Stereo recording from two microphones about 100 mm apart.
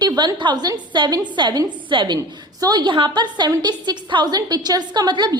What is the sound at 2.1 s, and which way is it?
A woman's voice, 40° right (ahead or behind).